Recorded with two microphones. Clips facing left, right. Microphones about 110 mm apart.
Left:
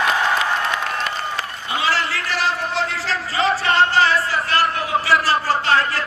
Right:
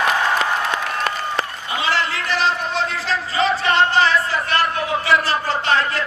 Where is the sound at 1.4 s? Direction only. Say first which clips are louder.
Even; 20° right (ahead or behind).